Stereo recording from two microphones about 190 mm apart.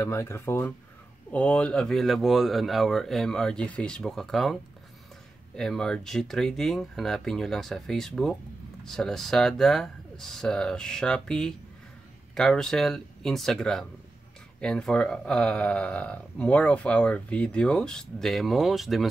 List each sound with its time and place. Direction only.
0.0 s speech: 15° left (ahead or behind)
5.6 s speech: 5° left (ahead or behind)